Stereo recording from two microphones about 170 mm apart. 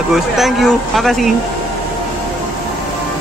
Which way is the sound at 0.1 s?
Centre (ahead or behind).